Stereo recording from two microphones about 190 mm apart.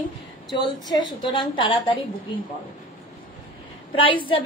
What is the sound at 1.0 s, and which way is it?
A woman's voice, 25° left (ahead or behind).